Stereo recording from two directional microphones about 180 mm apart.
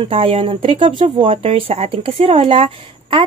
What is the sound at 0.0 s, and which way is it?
Speech, 30° right (ahead or behind).